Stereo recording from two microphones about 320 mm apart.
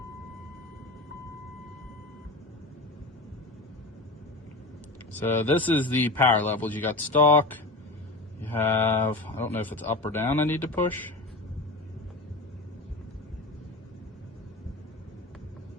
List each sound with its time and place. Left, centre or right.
5.4 s a man's voice: centre
5.6 s a man's voice: centre
8.5 s speech: centre